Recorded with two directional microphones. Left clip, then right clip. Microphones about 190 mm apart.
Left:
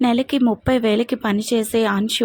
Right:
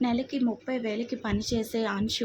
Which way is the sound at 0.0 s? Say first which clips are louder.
Left 10 dB; 35° left (ahead or behind).